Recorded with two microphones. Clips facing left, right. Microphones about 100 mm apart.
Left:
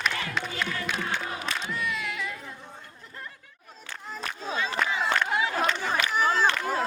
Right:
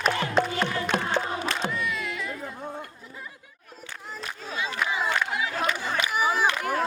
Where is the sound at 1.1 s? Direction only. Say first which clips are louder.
Right 4 dB; 40° right (ahead or behind).